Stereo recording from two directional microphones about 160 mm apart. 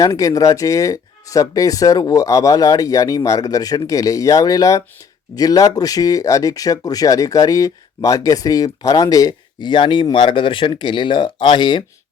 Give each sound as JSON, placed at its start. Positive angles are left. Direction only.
{"t": 0.0, "sound": "speech", "side_deg": 20}